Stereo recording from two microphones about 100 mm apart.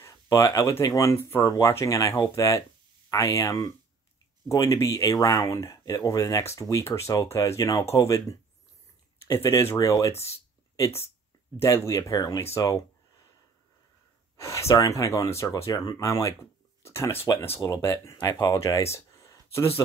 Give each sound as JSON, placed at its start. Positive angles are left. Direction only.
{"t": 0.0, "sound": "speech", "side_deg": 35}
{"t": 11.6, "sound": "speech", "side_deg": 30}
{"t": 14.3, "sound": "speech", "side_deg": 30}